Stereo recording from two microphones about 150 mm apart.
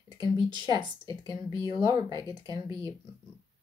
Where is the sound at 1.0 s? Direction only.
25° left (ahead or behind).